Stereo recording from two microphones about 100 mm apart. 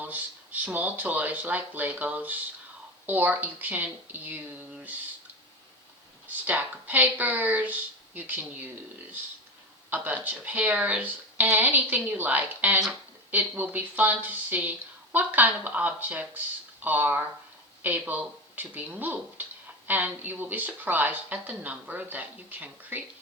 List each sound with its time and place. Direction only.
0.0 s speech: 15° right (ahead or behind)
6.2 s speech: 15° right (ahead or behind)
9.9 s speech: 15° right (ahead or behind)